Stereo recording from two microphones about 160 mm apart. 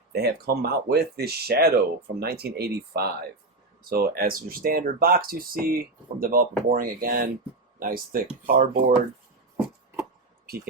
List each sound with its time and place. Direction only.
0.1 s speech: 80° right
3.8 s speech: 70° right (ahead or behind)